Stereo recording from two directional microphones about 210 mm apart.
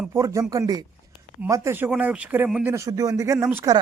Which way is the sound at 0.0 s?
15° right (ahead or behind).